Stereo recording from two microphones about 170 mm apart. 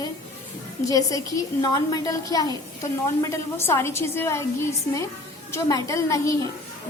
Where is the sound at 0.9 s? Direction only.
20° left (ahead or behind).